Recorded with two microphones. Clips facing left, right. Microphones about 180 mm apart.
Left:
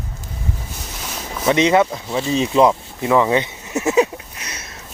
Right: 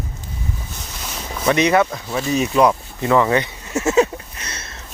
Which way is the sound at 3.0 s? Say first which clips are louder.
Even; 15° left (ahead or behind).